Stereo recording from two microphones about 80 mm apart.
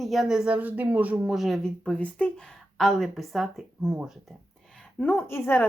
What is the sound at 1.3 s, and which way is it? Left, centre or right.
Speech, centre.